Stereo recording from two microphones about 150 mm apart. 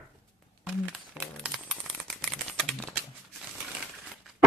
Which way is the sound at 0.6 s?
5° right (ahead or behind).